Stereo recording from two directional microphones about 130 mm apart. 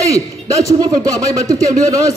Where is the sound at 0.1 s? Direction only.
25° right (ahead or behind).